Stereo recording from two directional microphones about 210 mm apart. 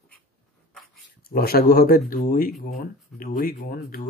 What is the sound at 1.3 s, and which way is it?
Speech, 45° left (ahead or behind).